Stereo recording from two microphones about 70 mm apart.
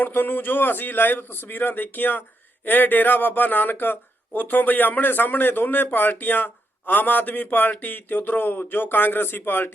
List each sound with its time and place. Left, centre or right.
0.0 s a man's voice: left